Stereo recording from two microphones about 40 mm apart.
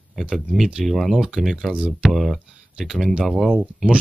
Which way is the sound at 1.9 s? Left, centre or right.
Centre.